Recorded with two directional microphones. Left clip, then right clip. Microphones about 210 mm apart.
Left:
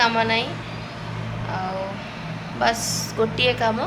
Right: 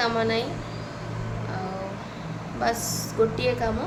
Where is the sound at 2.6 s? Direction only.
Centre (ahead or behind).